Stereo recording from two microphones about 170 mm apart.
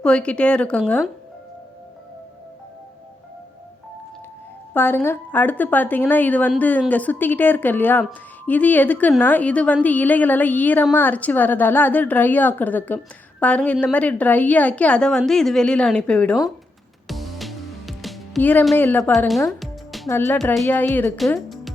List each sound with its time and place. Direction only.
0.0 s a woman's voice: 5° left (ahead or behind)
4.7 s a woman's voice: 10° left (ahead or behind)
17.1 s music: centre (ahead or behind)
18.8 s a woman's voice: 10° left (ahead or behind)
19.3 s music: centre (ahead or behind)
20.1 s a woman's voice: 15° left (ahead or behind)
20.4 s a woman's voice: centre (ahead or behind)
21.2 s speech: centre (ahead or behind)